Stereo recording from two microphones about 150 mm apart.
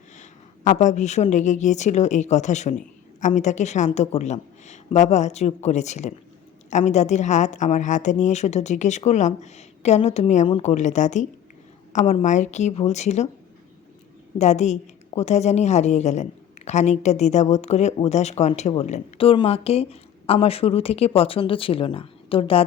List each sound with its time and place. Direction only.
0.2 s a woman's voice: 55° left (ahead or behind)
14.3 s a woman's voice: 50° left (ahead or behind)